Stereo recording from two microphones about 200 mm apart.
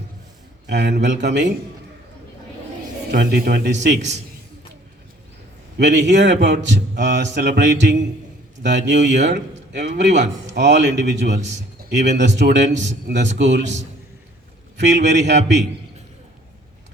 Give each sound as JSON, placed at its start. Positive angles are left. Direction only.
{"t": 0.7, "sound": "a man's voice", "side_deg": -60}
{"t": 3.1, "sound": "speech", "side_deg": -50}
{"t": 5.7, "sound": "a man's voice", "side_deg": -60}
{"t": 14.8, "sound": "a man's voice", "side_deg": -60}